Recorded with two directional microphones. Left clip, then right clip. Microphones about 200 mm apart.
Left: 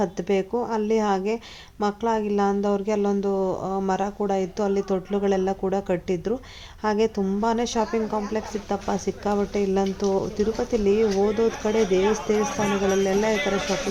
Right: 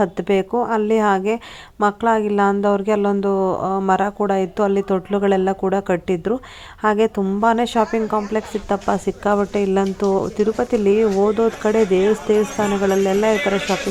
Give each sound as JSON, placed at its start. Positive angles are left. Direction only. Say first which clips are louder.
{"t": 0.0, "sound": "a woman's voice", "louder": "right 6 dB", "side_deg": -15}